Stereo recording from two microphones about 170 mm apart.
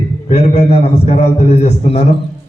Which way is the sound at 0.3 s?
40° left (ahead or behind).